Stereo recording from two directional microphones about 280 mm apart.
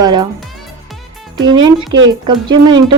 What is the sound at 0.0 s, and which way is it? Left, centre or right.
Music, centre.